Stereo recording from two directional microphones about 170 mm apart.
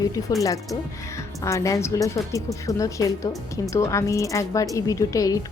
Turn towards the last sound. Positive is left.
turn(degrees=20)  # may be behind; listen again after turning